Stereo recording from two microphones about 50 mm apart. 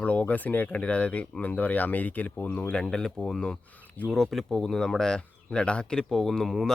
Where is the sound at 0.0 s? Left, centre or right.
Left.